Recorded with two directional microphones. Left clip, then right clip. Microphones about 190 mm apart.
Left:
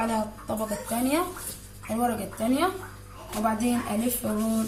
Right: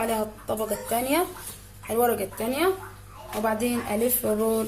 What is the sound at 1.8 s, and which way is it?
Speech, 50° right (ahead or behind).